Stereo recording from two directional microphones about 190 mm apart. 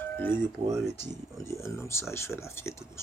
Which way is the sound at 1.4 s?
15° left (ahead or behind).